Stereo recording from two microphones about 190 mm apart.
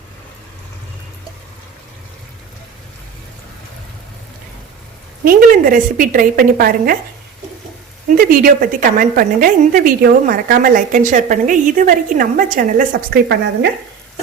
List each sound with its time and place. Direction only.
5.2 s a woman's voice: 50° right (ahead or behind)
8.0 s a woman's voice: 50° right (ahead or behind)